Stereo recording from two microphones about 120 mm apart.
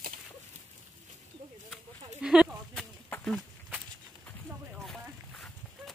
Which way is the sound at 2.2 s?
Centre (ahead or behind).